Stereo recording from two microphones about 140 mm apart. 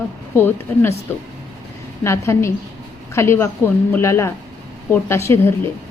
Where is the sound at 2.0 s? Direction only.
20° left (ahead or behind).